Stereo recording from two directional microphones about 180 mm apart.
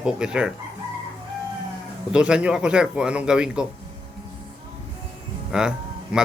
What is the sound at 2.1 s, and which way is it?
A man's voice, 5° right (ahead or behind).